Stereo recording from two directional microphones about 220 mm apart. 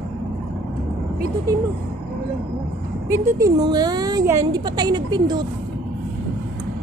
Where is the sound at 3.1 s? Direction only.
15° right (ahead or behind).